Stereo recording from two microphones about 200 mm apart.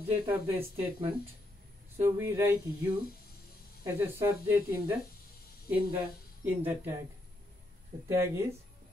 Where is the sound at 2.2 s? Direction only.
10° right (ahead or behind).